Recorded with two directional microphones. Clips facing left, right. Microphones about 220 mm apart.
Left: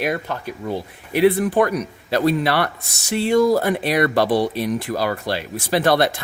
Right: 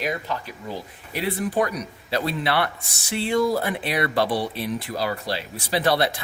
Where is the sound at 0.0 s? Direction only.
55° left (ahead or behind).